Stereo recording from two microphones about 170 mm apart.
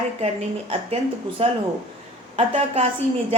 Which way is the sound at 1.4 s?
35° right (ahead or behind).